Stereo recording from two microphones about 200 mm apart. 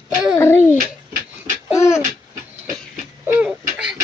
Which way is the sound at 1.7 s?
15° left (ahead or behind).